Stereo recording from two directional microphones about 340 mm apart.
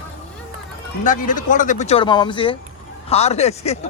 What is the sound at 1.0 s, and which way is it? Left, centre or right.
Speech, left.